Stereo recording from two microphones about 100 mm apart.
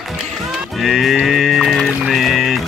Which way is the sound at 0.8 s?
5° right (ahead or behind).